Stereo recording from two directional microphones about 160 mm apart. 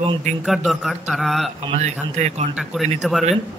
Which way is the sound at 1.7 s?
45° right (ahead or behind).